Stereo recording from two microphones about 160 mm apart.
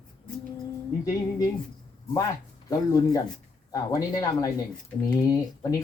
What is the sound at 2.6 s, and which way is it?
Speech, 20° left (ahead or behind).